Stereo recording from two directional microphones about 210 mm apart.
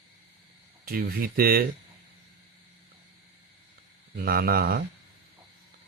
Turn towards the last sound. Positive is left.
turn(degrees=-45)  # may be behind; listen again after turning